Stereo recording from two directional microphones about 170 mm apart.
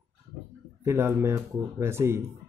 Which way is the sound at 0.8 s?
15° right (ahead or behind).